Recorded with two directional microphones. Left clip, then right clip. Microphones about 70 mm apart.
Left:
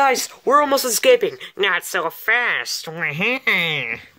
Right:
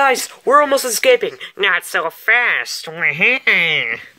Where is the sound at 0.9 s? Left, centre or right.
Left.